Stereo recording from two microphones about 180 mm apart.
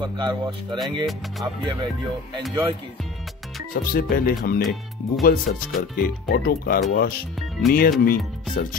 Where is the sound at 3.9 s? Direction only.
55° left (ahead or behind).